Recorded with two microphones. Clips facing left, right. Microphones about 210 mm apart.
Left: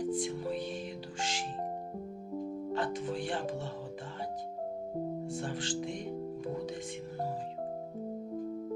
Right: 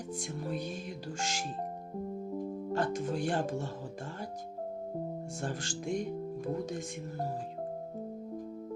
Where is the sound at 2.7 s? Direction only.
45° right (ahead or behind).